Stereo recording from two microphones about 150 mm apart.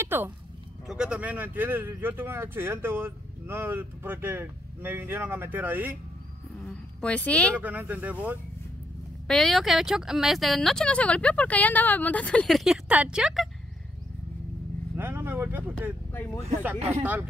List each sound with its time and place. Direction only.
0.0 s a sound: 15° right (ahead or behind)
0.8 s speech: 5° right (ahead or behind)
6.6 s speech: 5° left (ahead or behind)
7.6 s speech: 10° right (ahead or behind)
9.3 s speech: centre (ahead or behind)
15.0 s speech: 15° right (ahead or behind)
16.1 s speech: 15° left (ahead or behind)
17.0 s speech: 10° right (ahead or behind)